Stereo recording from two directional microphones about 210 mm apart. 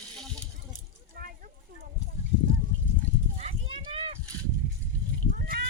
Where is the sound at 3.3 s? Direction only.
30° right (ahead or behind).